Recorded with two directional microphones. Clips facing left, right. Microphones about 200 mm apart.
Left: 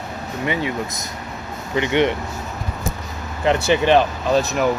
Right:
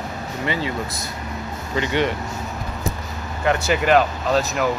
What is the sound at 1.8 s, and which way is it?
Speech, 20° left (ahead or behind).